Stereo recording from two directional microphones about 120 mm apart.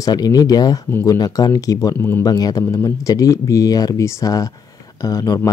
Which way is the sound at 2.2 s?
30° left (ahead or behind).